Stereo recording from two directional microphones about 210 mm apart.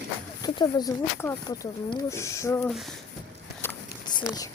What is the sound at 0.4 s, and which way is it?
Speech, 20° left (ahead or behind).